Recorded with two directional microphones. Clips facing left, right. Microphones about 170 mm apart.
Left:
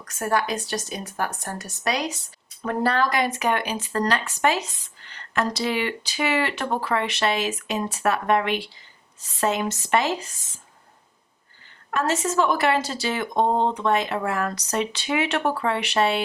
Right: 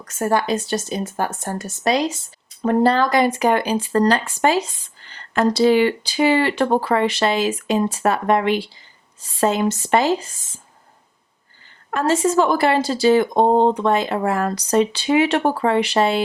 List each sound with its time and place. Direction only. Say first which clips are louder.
0.0 s a woman's voice: right 4 dB; 25° right (ahead or behind)
11.9 s a woman's voice: right 6 dB; 30° right (ahead or behind)